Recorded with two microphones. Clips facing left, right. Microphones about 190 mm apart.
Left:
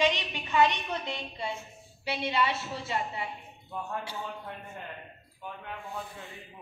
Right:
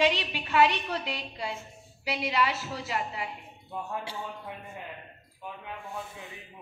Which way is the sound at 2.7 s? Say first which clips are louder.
Even; 25° left (ahead or behind).